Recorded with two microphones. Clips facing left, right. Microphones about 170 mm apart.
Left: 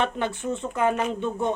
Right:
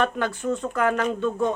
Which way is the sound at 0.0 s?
25° left (ahead or behind).